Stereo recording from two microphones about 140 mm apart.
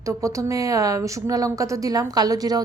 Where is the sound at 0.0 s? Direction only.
25° right (ahead or behind).